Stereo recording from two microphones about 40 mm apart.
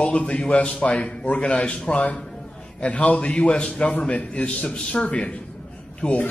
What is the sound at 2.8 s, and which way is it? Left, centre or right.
A man's voice, left.